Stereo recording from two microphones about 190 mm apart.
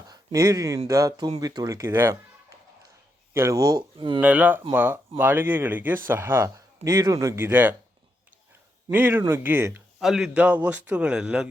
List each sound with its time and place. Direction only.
0.1 s speech: 15° right (ahead or behind)
3.3 s speech: 15° right (ahead or behind)
4.2 s speech: 10° right (ahead or behind)
8.9 s a man's voice: 10° right (ahead or behind)